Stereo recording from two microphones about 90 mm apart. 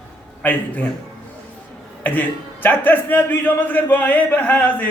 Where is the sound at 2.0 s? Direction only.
20° left (ahead or behind).